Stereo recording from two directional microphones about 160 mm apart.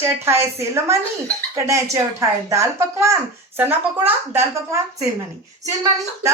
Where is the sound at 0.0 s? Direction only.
15° right (ahead or behind).